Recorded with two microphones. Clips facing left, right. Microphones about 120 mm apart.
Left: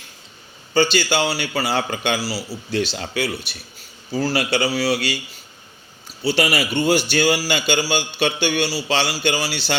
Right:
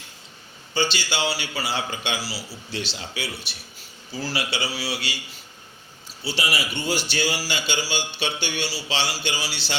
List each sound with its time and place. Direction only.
0.7 s a man's voice: 45° left (ahead or behind)
6.2 s a man's voice: 60° left (ahead or behind)